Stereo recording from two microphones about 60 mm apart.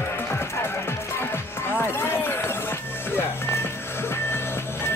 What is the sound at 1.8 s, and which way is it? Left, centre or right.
Basketball bounce, left.